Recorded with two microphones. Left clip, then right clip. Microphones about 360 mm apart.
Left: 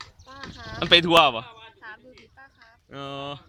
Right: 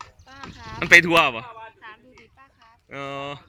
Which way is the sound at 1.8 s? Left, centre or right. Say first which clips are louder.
Left 1 dB; left.